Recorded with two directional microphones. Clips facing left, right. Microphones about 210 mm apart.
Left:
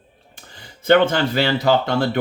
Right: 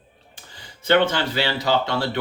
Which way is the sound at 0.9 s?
50° left (ahead or behind).